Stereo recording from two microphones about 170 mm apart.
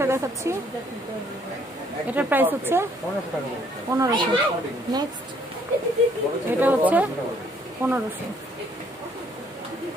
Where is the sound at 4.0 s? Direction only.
20° right (ahead or behind).